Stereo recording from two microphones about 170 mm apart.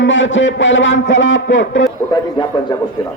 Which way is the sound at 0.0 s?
90° left.